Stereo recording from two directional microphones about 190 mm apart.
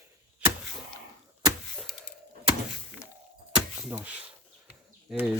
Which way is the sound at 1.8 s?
Centre (ahead or behind).